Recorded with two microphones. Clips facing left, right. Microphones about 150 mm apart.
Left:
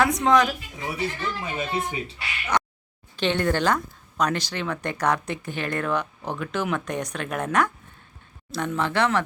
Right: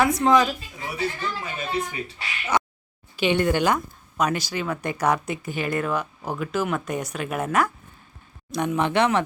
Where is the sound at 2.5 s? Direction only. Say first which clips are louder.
Right 1 dB; 5° right (ahead or behind).